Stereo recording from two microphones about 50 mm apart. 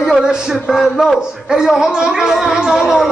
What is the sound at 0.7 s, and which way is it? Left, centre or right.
Speech, centre.